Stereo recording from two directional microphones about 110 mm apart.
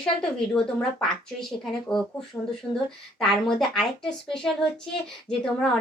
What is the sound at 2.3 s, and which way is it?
Speech, 20° left (ahead or behind).